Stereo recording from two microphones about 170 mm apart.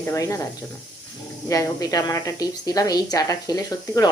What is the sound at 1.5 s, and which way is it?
A woman's voice, 20° left (ahead or behind).